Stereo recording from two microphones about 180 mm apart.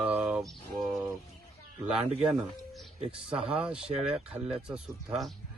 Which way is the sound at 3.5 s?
5° right (ahead or behind).